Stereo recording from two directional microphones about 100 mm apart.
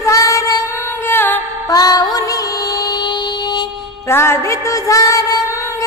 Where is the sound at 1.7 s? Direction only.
35° left (ahead or behind).